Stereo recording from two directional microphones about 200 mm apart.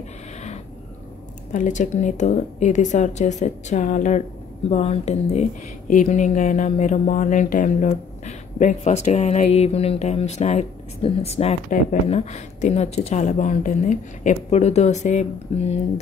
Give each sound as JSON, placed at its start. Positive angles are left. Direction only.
{"t": 1.5, "sound": "speech", "side_deg": 40}